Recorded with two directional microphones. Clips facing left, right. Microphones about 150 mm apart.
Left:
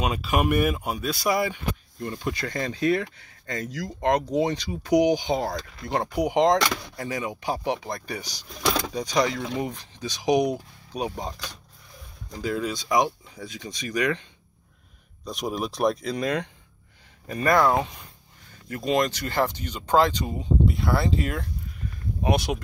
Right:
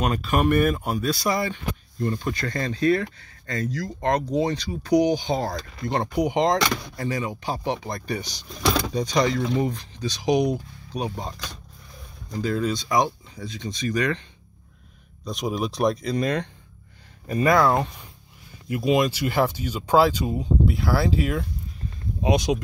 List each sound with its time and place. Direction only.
0.0 s speech: 5° left (ahead or behind)
15.2 s speech: 5° left (ahead or behind)
17.3 s speech: 5° right (ahead or behind)
22.2 s speech: 15° right (ahead or behind)